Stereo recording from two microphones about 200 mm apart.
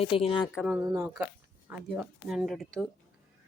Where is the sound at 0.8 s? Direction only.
15° right (ahead or behind).